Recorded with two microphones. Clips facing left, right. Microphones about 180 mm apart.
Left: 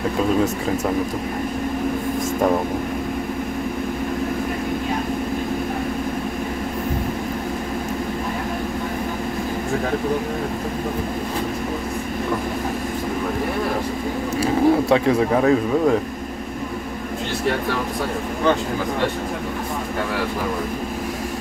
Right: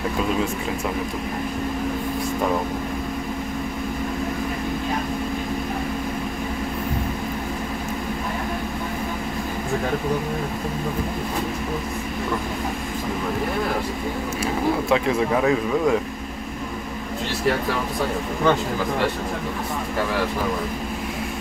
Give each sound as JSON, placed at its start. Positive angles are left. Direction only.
{"t": 14.4, "sound": "speech", "side_deg": 35}